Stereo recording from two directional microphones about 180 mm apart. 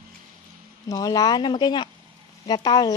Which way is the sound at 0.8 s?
20° left (ahead or behind).